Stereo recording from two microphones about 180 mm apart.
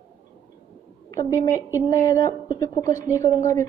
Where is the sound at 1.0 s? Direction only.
20° left (ahead or behind).